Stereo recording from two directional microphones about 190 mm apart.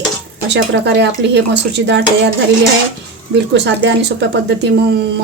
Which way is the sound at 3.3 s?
65° right (ahead or behind).